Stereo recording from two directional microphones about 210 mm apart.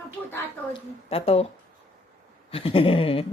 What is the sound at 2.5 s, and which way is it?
Speech, 25° left (ahead or behind).